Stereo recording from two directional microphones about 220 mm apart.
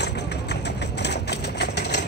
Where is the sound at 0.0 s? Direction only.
50° left (ahead or behind).